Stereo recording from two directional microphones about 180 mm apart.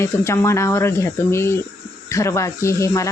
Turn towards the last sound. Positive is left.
turn(degrees=15)  # may be behind; listen again after turning